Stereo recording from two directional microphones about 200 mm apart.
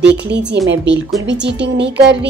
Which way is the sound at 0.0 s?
60° right (ahead or behind).